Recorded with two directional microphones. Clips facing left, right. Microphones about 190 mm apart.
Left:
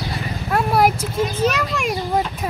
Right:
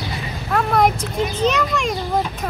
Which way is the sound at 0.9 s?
15° right (ahead or behind).